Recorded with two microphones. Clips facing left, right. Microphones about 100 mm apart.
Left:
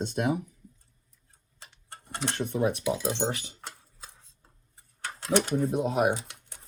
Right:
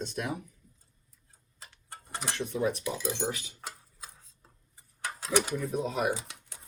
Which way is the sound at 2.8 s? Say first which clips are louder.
Left 5 dB; 25° left (ahead or behind).